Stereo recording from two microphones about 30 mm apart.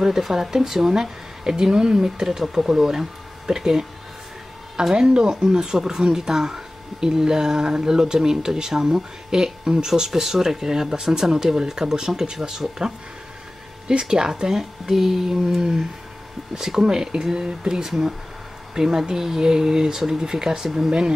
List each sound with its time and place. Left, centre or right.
0.2 s speech: centre
1.5 s speech: right
16.8 s speech: right